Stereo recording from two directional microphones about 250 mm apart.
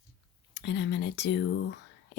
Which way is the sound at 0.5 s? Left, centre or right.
Left.